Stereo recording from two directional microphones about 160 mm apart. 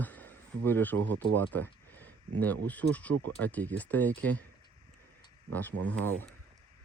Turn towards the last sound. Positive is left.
turn(degrees=10)  # may be behind; listen again after turning